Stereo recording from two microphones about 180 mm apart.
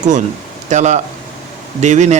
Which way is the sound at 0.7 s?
40° right (ahead or behind).